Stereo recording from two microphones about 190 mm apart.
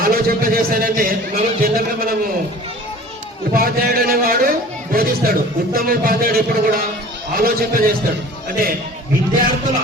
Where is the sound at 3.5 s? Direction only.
50° right (ahead or behind).